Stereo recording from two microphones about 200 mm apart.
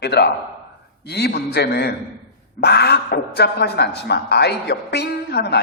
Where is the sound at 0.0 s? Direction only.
55° left (ahead or behind).